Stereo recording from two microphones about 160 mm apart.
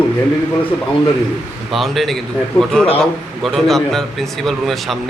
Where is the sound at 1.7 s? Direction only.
Centre (ahead or behind).